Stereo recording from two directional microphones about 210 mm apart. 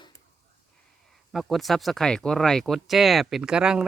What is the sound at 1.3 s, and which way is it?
Speech, centre (ahead or behind).